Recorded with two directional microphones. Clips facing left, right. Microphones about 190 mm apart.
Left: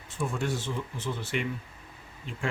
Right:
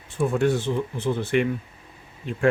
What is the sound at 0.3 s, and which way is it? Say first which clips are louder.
Speech: right 11 dB; 60° right (ahead or behind).